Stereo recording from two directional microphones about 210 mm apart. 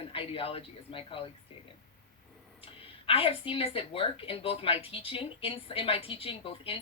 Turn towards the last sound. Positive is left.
turn(degrees=25)  # may be behind; listen again after turning